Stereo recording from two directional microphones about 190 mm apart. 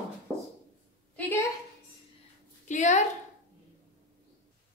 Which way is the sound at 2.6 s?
40° left (ahead or behind).